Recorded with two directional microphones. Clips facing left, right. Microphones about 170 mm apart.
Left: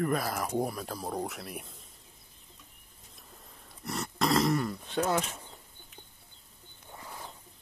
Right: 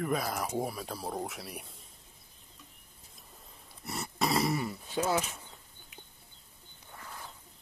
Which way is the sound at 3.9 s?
Centre (ahead or behind).